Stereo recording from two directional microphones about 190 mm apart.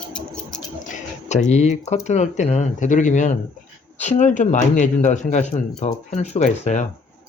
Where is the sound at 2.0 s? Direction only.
35° left (ahead or behind).